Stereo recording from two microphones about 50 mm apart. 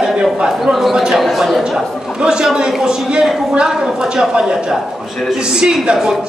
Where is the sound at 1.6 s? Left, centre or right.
Centre.